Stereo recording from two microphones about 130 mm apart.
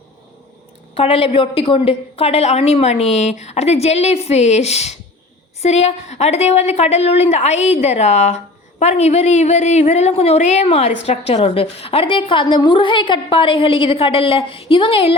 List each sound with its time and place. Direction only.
0.9 s a woman's voice: 45° left (ahead or behind)